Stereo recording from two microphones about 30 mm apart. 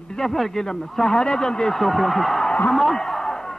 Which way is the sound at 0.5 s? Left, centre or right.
Left.